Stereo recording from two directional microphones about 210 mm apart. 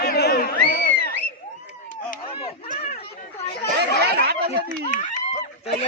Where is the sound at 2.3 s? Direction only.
30° left (ahead or behind).